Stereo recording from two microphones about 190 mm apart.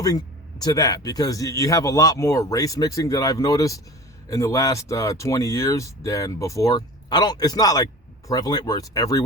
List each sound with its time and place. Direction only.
0.0 s speech: 20° left (ahead or behind)